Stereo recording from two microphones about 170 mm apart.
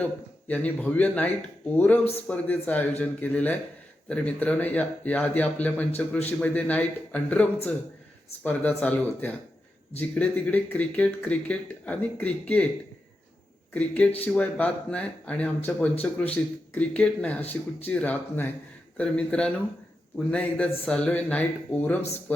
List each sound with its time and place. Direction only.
0.0 s speech: 10° left (ahead or behind)
5.9 s a man's voice: 40° left (ahead or behind)
6.4 s speech: 10° left (ahead or behind)
13.7 s speech: 10° left (ahead or behind)